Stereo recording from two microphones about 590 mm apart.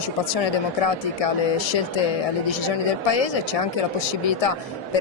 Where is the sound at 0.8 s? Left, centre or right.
Left.